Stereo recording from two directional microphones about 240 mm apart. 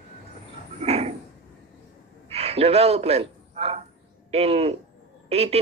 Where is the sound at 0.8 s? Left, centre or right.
Right.